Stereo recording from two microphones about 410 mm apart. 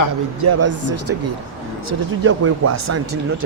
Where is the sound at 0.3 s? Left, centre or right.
Right.